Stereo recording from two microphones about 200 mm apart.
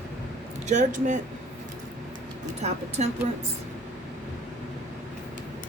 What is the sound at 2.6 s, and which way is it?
Speech, 35° right (ahead or behind).